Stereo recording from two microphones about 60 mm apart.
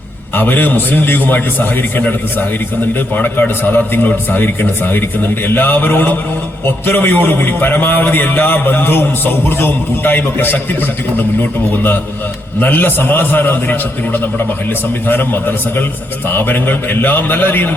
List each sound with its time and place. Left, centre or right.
0.3 s a man's voice: left
12.5 s a man's voice: left